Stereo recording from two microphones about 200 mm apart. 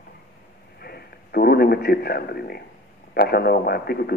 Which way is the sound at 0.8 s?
50° left (ahead or behind).